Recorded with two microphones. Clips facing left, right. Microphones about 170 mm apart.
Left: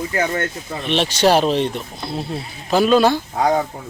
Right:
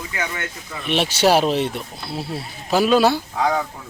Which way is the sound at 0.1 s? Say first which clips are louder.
Left 5 dB; 45° left (ahead or behind).